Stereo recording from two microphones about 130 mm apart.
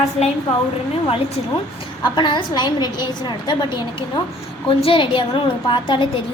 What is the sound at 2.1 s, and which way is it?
A woman's voice, 35° left (ahead or behind).